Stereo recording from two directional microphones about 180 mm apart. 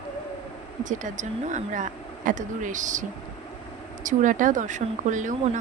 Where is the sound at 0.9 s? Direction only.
45° right (ahead or behind).